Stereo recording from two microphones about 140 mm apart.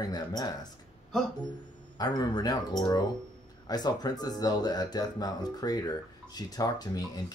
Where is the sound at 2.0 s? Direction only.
30° left (ahead or behind).